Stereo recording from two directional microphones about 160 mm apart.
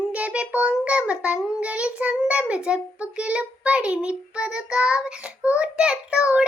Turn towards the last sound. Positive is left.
turn(degrees=-5)  # may be behind; listen again after turning